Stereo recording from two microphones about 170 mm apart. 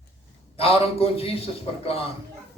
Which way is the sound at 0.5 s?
35° left (ahead or behind).